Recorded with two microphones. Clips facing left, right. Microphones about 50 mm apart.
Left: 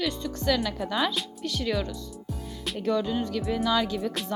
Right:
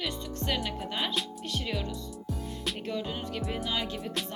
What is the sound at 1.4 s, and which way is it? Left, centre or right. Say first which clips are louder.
Speech: left 6 dB; left.